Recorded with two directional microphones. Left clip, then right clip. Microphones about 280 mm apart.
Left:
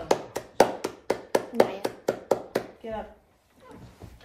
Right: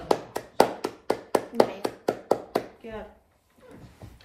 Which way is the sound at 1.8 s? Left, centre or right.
Centre.